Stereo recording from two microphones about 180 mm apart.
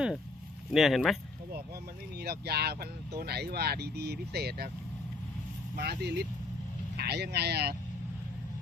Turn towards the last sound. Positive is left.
turn(degrees=-65)  # may be behind; listen again after turning